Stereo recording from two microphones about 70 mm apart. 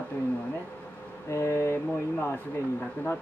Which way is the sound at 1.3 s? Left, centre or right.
Left.